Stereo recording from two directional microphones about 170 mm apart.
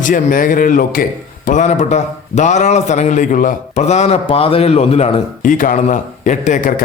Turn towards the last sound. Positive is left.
turn(degrees=50)  # may be behind; listen again after turning